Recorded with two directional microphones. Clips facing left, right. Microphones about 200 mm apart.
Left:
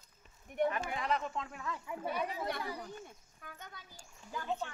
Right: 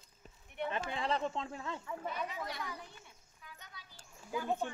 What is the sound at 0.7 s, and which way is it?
Speech, 30° right (ahead or behind).